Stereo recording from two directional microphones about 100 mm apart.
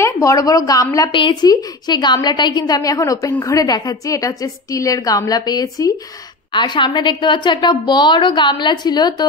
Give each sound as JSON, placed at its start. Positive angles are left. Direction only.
{"t": 0.0, "sound": "a woman's voice", "side_deg": 35}
{"t": 1.1, "sound": "a woman's voice", "side_deg": 50}
{"t": 6.5, "sound": "a woman's voice", "side_deg": 50}